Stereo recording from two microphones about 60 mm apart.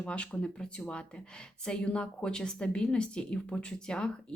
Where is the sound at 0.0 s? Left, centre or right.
Centre.